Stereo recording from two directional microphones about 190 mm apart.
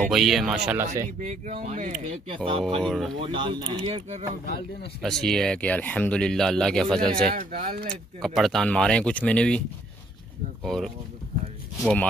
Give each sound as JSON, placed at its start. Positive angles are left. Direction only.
{"t": 0.1, "sound": "speech", "side_deg": 0}
{"t": 1.0, "sound": "speech", "side_deg": -40}
{"t": 2.3, "sound": "speech", "side_deg": -25}
{"t": 2.8, "sound": "speech", "side_deg": 0}
{"t": 3.2, "sound": "speech", "side_deg": -25}
{"t": 5.0, "sound": "speech", "side_deg": 5}
{"t": 7.3, "sound": "speech", "side_deg": -45}
{"t": 7.9, "sound": "speech", "side_deg": 0}
{"t": 10.6, "sound": "speech", "side_deg": 0}